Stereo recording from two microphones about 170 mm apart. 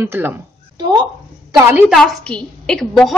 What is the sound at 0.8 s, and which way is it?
Speech, 25° right (ahead or behind).